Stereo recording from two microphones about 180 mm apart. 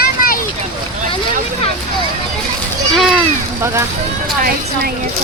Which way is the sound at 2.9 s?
Centre (ahead or behind).